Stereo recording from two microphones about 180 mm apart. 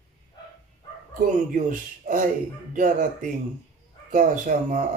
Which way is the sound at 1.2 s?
50° right (ahead or behind).